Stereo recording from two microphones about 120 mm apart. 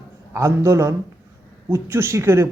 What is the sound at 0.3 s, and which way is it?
Speech, 25° right (ahead or behind).